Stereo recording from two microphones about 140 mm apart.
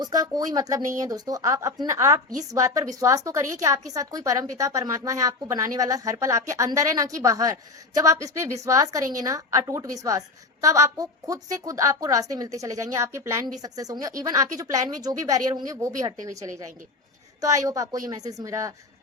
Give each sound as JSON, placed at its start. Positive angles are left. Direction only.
{"t": 0.0, "sound": "a woman's voice", "side_deg": -25}